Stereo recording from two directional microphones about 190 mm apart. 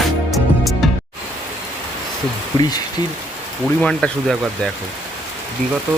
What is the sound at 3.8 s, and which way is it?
Speech, 5° left (ahead or behind).